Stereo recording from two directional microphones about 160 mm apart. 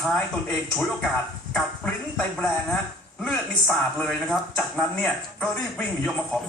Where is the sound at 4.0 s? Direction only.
5° left (ahead or behind).